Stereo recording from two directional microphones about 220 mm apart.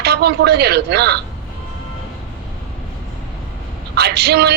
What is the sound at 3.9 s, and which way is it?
Speech, 45° right (ahead or behind).